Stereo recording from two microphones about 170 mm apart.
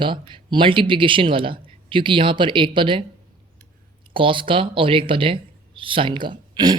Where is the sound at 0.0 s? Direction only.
30° right (ahead or behind).